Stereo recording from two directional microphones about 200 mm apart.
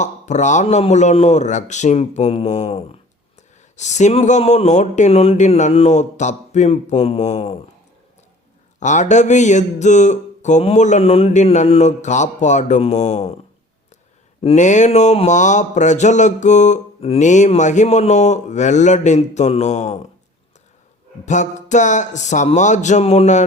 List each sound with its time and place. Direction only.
0.0 s speech: 35° left (ahead or behind)
8.8 s speech: 35° left (ahead or behind)
14.4 s speech: 35° left (ahead or behind)
21.2 s speech: 35° left (ahead or behind)